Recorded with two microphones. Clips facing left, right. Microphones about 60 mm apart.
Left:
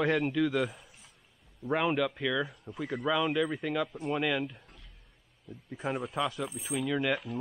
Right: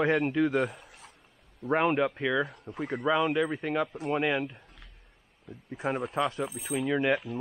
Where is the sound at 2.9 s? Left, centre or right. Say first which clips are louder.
Right 3 dB; centre.